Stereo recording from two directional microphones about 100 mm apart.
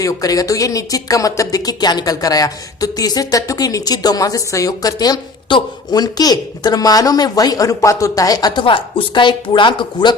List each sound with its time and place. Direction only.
0.0 s speech: 35° left (ahead or behind); by 10.2 s 50° left (ahead or behind)